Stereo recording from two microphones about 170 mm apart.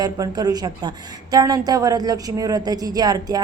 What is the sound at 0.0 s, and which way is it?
A woman's voice, 25° right (ahead or behind).